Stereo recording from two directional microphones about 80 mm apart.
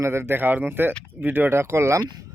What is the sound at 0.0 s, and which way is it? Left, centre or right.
Speech, right.